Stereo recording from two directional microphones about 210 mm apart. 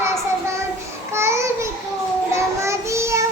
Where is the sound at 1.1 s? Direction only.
15° right (ahead or behind).